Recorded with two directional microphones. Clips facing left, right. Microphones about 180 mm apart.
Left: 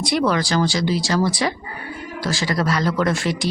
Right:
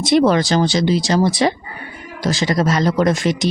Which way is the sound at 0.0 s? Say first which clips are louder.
Right 6 dB; 25° right (ahead or behind).